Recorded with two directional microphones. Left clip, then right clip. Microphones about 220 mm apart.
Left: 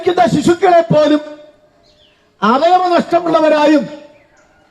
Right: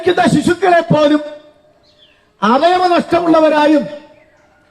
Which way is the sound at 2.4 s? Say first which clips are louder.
Even; 25° left (ahead or behind).